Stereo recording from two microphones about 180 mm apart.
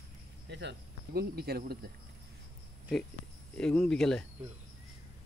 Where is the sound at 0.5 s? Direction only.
75° right (ahead or behind).